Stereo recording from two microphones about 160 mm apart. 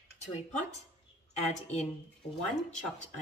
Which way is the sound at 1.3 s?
45° left (ahead or behind).